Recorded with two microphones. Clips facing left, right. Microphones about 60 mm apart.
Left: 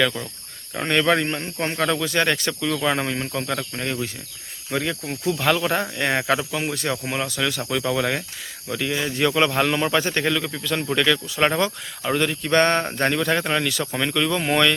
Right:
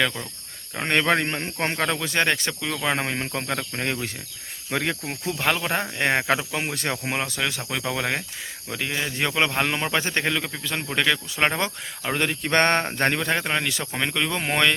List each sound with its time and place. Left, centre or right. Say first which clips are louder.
0.9 s speech: left 2 dB; right
3.0 s speech: left 2 dB; right
4.7 s speech: left 1 dB; right
5.0 s speech: left 3 dB; right
12.1 s speech: left 3 dB; right
12.8 s speech: left 2 dB; right